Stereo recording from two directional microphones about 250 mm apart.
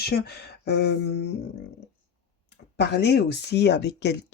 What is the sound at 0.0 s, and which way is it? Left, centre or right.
Speech, left.